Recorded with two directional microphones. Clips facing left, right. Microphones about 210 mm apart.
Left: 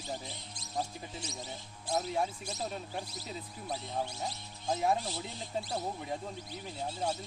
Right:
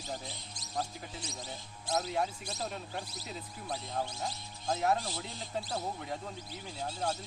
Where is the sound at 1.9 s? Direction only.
5° left (ahead or behind).